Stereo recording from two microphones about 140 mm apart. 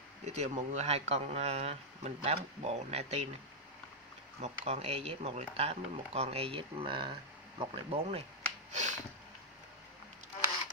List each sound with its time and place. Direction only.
0.2 s speech: 55° right (ahead or behind)
4.4 s speech: 50° right (ahead or behind)